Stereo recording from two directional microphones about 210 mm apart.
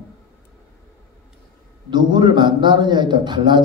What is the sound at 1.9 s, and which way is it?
Speech, 20° right (ahead or behind).